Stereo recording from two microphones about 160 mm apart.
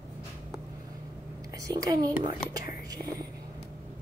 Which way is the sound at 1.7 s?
20° right (ahead or behind).